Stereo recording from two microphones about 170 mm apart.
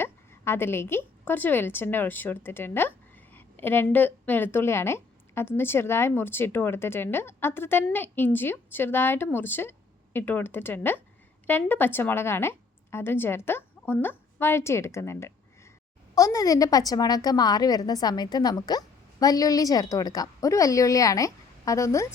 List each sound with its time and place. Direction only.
0.0 s a woman's voice: 15° left (ahead or behind)